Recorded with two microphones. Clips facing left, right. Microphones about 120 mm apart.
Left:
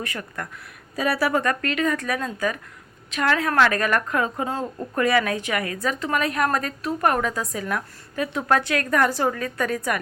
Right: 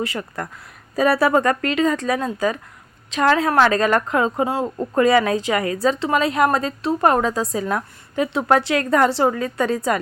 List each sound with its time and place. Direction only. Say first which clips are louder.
0.0 s a woman's voice: right 6 dB; 25° right (ahead or behind)